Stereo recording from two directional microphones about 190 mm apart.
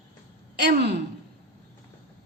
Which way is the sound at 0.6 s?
60° right (ahead or behind).